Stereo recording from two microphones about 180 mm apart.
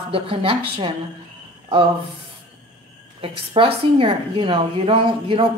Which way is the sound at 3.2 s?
30° right (ahead or behind).